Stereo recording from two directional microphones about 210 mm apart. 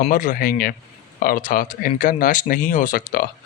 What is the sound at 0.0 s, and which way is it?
Speech, 40° left (ahead or behind).